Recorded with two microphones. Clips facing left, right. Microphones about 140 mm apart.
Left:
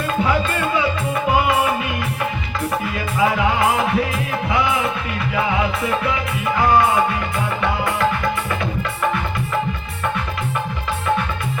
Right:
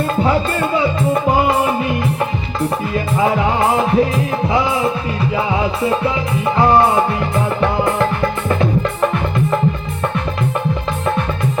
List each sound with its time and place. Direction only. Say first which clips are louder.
0.8 s music: right 5 dB; 35° right (ahead or behind)
2.9 s music: right 3 dB; 35° right (ahead or behind)